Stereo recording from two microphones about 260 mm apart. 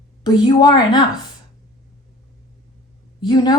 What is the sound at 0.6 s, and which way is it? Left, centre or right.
Speech, centre.